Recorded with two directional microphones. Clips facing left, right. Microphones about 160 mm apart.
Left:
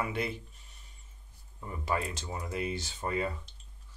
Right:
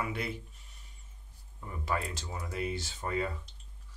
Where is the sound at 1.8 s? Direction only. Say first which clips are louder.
Left 2 dB; 20° left (ahead or behind).